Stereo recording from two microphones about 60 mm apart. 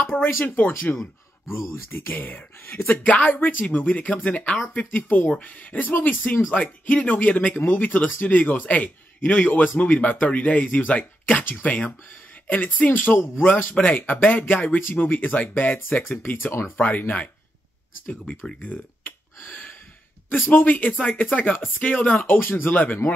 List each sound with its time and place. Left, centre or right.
0.1 s speech: left
16.1 s speech: left
16.7 s speech: left
18.6 s speech: left
20.2 s speech: left